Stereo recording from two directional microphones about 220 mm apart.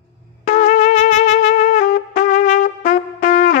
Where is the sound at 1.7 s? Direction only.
35° left (ahead or behind).